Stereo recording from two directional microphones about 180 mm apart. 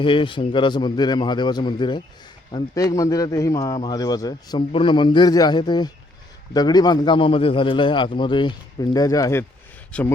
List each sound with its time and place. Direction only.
0.0 s speech: 30° left (ahead or behind); by 10.1 s 5° left (ahead or behind)